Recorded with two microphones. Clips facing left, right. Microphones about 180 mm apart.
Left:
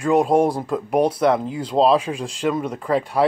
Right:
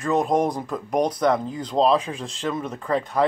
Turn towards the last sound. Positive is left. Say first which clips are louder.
# left 3 dB
turn(degrees=10)  # may be behind; listen again after turning